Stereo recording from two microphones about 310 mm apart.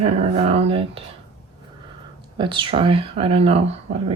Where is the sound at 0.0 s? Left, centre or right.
Centre.